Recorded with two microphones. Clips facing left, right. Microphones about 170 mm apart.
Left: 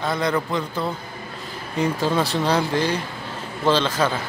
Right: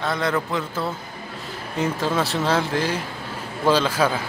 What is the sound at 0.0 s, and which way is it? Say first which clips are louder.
A man's voice: left 1 dB; centre (ahead or behind).